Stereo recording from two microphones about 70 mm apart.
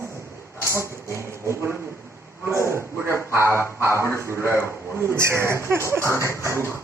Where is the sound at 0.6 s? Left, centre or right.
Right.